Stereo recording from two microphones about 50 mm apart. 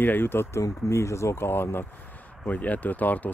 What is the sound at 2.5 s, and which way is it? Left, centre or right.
Speech, left.